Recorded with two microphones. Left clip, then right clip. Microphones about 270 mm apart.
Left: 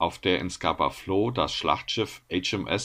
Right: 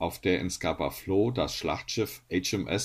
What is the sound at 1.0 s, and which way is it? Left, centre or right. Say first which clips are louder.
Speech: left 1 dB; left.